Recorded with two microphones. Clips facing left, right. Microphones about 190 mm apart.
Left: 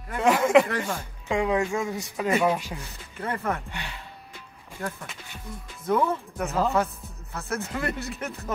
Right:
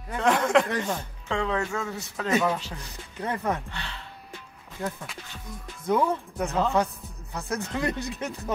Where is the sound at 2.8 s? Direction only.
15° right (ahead or behind).